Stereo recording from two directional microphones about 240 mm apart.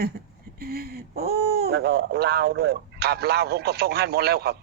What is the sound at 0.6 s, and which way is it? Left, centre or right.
Speech, right.